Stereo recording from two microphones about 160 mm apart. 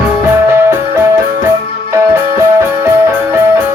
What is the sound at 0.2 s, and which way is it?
Music, 15° right (ahead or behind).